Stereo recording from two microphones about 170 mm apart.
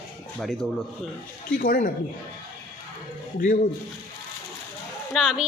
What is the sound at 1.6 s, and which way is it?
Speech, 55° left (ahead or behind).